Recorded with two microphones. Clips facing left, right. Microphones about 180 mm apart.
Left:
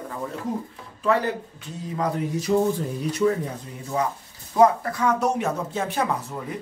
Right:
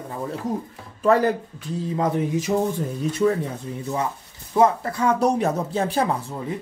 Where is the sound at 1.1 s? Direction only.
40° right (ahead or behind).